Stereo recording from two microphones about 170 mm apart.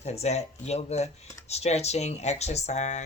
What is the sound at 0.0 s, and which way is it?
Speech, 40° left (ahead or behind).